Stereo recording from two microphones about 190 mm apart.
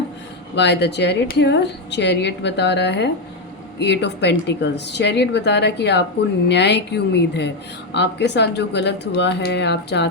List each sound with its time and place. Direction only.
0.5 s a woman's voice: 65° left (ahead or behind)